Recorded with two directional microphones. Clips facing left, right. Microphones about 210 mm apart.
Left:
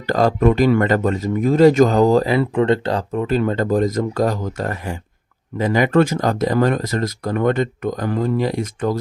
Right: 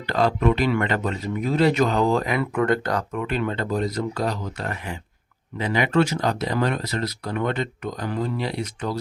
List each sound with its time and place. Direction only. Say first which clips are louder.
0.1 s a man's voice: left 5 dB; 45° left (ahead or behind)